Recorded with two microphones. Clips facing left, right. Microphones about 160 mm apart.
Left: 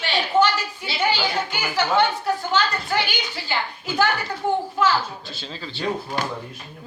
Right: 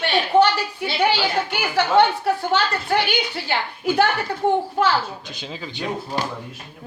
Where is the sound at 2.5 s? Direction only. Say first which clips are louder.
Right 1 dB; 60° right (ahead or behind).